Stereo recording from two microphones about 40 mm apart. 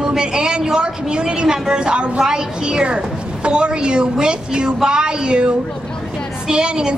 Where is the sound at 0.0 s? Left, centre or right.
Centre.